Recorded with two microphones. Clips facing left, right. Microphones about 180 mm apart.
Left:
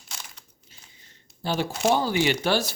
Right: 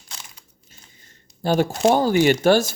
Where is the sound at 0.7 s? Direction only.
45° right (ahead or behind).